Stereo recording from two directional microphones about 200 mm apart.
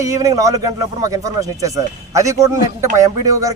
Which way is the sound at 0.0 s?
15° right (ahead or behind).